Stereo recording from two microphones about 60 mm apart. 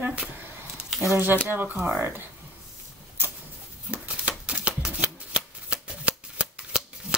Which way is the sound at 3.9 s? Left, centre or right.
Right.